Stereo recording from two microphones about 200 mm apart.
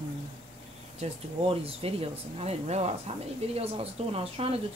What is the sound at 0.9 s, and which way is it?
Speech, 30° right (ahead or behind).